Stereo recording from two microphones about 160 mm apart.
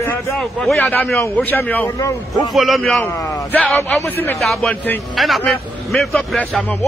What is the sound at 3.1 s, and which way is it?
A man's voice, 15° left (ahead or behind).